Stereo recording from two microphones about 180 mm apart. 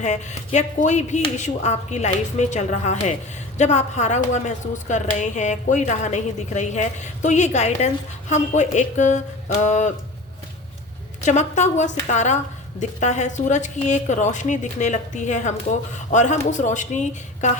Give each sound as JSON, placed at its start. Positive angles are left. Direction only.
{"t": 0.0, "sound": "a woman's voice", "side_deg": 40}
{"t": 11.3, "sound": "a woman's voice", "side_deg": 40}